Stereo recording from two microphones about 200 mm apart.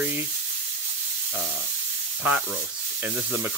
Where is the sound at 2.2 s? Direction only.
10° right (ahead or behind).